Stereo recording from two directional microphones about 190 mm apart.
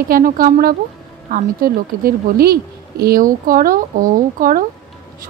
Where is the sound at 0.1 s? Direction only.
50° right (ahead or behind).